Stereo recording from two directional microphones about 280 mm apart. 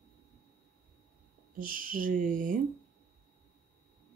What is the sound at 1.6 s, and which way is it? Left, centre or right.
Speech, right.